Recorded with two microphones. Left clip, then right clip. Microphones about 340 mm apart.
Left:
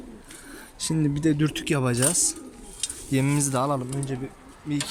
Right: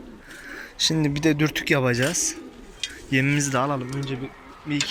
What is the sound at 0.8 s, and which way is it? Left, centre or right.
Speech, centre.